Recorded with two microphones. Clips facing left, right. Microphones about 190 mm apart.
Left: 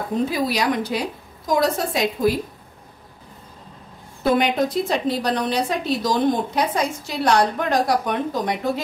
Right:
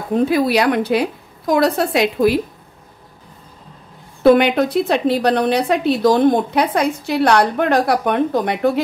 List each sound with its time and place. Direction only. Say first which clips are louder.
0.1 s a woman's voice: right 8 dB; 60° right (ahead or behind)
4.2 s a woman's voice: right 7 dB; 65° right (ahead or behind)